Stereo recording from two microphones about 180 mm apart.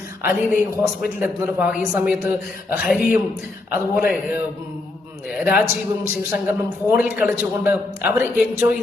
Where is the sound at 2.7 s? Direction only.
Centre (ahead or behind).